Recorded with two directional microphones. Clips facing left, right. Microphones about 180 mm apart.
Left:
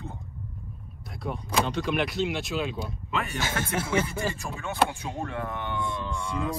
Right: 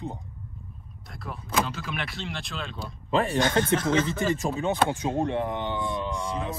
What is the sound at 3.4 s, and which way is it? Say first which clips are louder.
Speech: right 7 dB; 10° left (ahead or behind).